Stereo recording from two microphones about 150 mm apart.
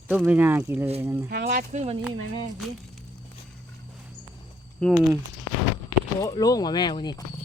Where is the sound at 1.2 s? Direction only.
90° right; by 1.9 s 50° right (ahead or behind).